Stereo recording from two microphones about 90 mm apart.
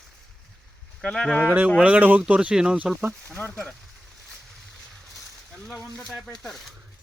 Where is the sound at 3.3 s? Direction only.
10° left (ahead or behind).